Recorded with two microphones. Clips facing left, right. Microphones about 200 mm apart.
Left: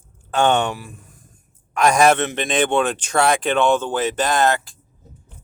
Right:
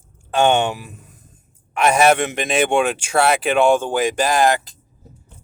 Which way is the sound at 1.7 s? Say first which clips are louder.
Even; 5° right (ahead or behind).